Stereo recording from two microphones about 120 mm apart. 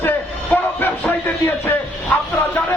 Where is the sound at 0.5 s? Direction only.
15° left (ahead or behind).